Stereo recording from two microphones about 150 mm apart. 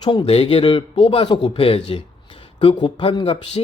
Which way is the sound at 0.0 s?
30° left (ahead or behind).